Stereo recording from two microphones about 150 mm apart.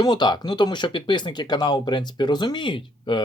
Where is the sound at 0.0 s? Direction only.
30° left (ahead or behind).